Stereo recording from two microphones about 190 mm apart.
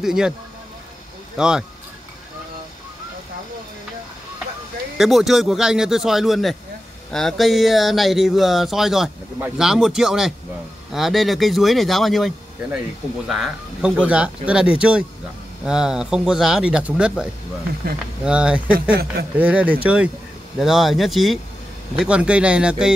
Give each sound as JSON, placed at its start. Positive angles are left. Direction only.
{"t": 0.0, "sound": "speech", "side_deg": -5}
{"t": 1.3, "sound": "speech", "side_deg": -5}
{"t": 4.9, "sound": "speech", "side_deg": 0}
{"t": 18.8, "sound": "speech", "side_deg": -55}
{"t": 19.3, "sound": "speech", "side_deg": -10}